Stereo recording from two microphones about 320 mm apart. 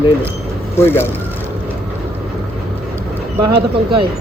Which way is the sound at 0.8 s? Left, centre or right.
Centre.